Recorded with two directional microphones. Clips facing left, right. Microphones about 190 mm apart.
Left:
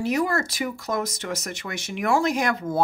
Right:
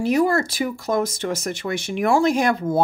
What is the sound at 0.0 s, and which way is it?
Speech, 30° right (ahead or behind).